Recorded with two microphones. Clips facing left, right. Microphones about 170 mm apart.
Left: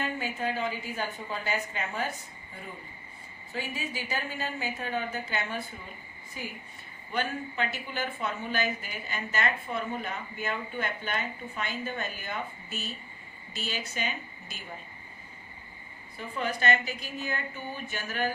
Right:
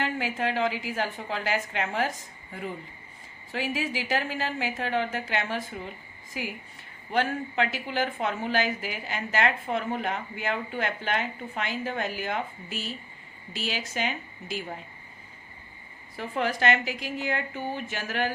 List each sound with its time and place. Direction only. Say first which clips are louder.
0.0 s a woman's voice: right 3 dB; 90° right
3.5 s a woman's voice: right 6 dB; 90° right
7.1 s a woman's voice: right 5 dB; 80° right
16.1 s a woman's voice: right 4 dB; 85° right